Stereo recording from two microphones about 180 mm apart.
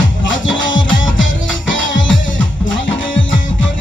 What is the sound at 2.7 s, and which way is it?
Music, 90° left.